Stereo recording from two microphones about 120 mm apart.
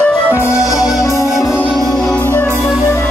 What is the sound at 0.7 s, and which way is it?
Music, 30° left (ahead or behind).